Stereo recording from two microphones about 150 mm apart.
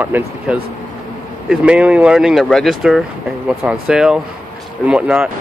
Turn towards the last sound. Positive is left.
turn(degrees=-5)  # may be behind; listen again after turning